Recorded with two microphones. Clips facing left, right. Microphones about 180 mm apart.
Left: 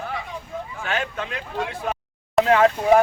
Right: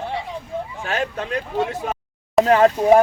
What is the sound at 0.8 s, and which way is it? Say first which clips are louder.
Speech: right 2 dB; 40° right (ahead or behind).